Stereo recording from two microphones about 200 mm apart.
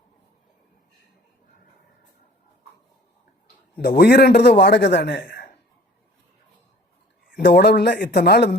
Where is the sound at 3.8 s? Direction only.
50° left (ahead or behind).